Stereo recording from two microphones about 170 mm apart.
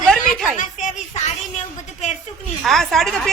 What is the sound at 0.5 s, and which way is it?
Speech, 45° left (ahead or behind).